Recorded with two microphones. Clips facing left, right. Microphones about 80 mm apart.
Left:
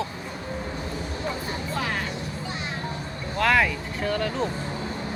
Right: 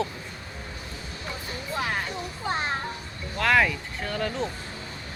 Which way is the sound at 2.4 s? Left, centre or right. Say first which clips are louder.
Right 10 dB; right.